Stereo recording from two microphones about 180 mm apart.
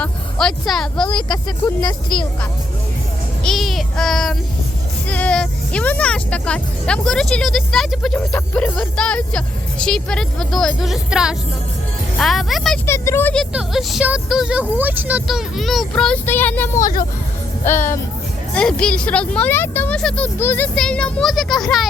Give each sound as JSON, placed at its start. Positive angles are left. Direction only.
{"t": 0.0, "sound": "speech", "side_deg": 5}
{"t": 1.0, "sound": "speech", "side_deg": 25}
{"t": 2.0, "sound": "speech", "side_deg": 5}
{"t": 12.8, "sound": "speech", "side_deg": 15}
{"t": 18.5, "sound": "speech", "side_deg": 5}